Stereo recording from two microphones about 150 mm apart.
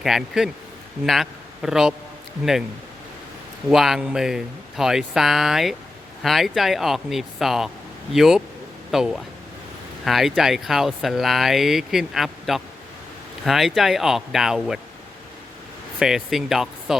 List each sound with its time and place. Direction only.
0.0 s a man's voice: 5° right (ahead or behind)
3.7 s speech: centre (ahead or behind)
16.0 s speech: 5° right (ahead or behind)